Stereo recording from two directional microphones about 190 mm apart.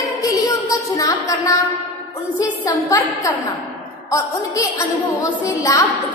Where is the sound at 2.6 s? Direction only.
20° left (ahead or behind).